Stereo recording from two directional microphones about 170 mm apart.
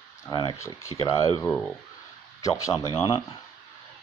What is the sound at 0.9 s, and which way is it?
Speech, 35° left (ahead or behind).